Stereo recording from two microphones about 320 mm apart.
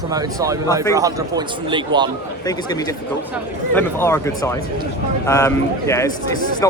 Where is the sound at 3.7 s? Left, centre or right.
Centre.